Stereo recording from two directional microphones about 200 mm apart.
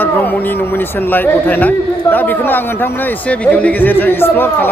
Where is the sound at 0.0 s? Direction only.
10° left (ahead or behind).